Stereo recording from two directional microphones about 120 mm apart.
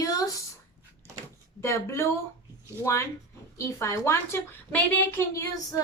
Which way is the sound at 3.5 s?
25° left (ahead or behind).